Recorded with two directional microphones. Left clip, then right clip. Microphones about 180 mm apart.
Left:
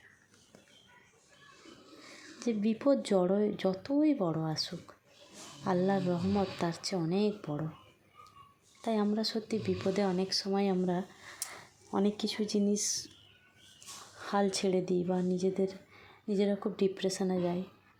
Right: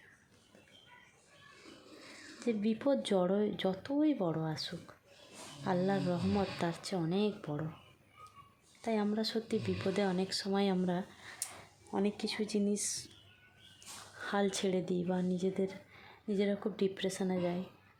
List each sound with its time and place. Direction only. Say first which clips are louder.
2.4 s speech: left 2 dB; 10° left (ahead or behind)
8.8 s speech: left 3 dB; 10° left (ahead or behind)
11.4 s a sound: left 3 dB; 30° left (ahead or behind)
11.9 s speech: left 3 dB; 15° left (ahead or behind)
14.2 s speech: left 3 dB; 5° left (ahead or behind)